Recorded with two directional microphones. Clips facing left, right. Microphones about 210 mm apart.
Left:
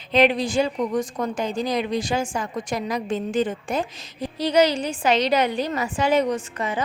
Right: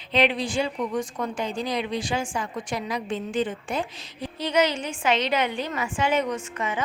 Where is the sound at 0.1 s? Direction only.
40° left (ahead or behind).